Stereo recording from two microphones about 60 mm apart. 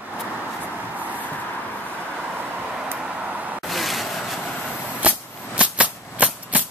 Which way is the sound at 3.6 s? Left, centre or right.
Centre.